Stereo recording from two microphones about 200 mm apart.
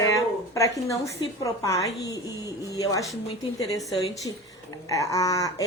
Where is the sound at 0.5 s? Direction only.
15° left (ahead or behind).